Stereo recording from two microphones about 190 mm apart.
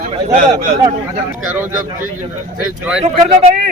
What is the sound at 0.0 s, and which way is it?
Speech, 40° right (ahead or behind).